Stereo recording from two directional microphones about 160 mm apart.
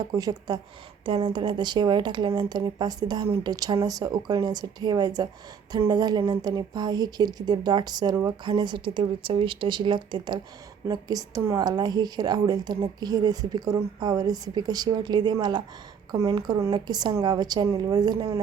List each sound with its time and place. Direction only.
0.0 s speech: 20° right (ahead or behind)